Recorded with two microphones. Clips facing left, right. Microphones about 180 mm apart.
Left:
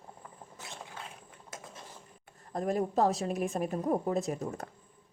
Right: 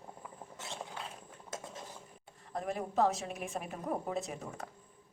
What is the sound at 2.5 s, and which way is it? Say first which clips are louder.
A woman's voice: left 6 dB; 40° left (ahead or behind).